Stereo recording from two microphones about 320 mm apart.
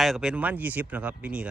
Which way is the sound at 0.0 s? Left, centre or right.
Centre.